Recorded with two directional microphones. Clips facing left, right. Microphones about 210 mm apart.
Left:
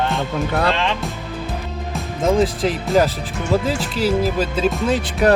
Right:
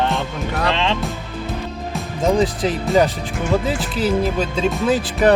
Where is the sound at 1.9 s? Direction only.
Centre (ahead or behind).